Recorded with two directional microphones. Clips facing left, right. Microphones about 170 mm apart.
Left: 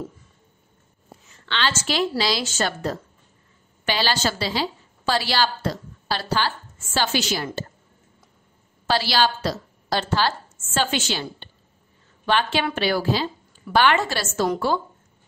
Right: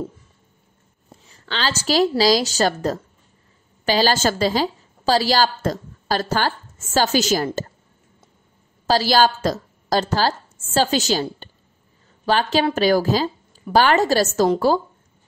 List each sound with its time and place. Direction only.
1.4 s a woman's voice: 40° right (ahead or behind)
8.8 s a woman's voice: 40° right (ahead or behind)